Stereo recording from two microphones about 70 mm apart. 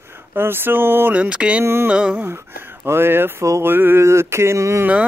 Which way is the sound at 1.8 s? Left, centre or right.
Centre.